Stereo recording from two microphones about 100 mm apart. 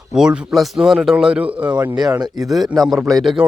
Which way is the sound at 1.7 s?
45° right (ahead or behind).